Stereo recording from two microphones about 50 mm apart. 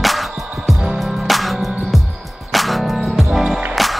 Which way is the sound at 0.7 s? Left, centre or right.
Centre.